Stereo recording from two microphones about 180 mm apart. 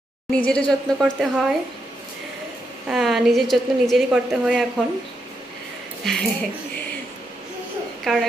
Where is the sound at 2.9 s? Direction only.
Centre (ahead or behind).